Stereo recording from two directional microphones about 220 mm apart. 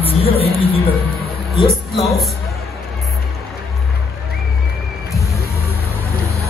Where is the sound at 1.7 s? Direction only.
Centre (ahead or behind).